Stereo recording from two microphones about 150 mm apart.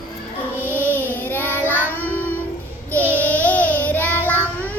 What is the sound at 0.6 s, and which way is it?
Child singing, 15° right (ahead or behind).